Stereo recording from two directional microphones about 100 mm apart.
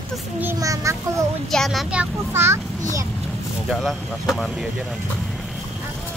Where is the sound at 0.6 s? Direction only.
35° right (ahead or behind).